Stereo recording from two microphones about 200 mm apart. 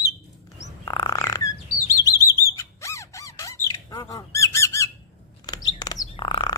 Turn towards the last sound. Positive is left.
turn(degrees=25)  # may be behind; listen again after turning